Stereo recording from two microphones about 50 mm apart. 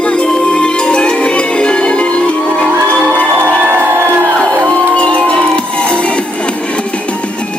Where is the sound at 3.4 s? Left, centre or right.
Right.